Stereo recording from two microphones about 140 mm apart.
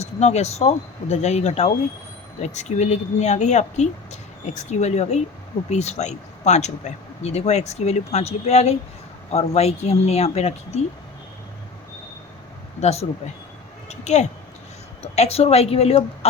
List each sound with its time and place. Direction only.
0.0 s speech: 55° left (ahead or behind)
12.8 s speech: 50° left (ahead or behind)